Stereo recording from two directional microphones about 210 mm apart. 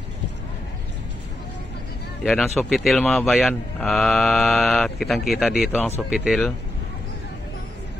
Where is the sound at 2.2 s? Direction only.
Centre (ahead or behind).